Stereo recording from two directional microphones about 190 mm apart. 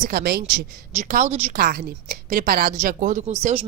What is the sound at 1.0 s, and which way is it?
Speech, 40° right (ahead or behind).